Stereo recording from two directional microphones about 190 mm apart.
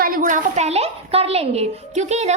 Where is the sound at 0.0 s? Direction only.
50° right (ahead or behind).